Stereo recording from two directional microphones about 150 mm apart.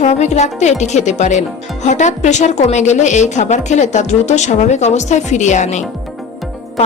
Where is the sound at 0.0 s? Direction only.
50° left (ahead or behind).